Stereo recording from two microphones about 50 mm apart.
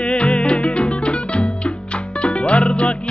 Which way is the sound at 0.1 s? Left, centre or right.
Left.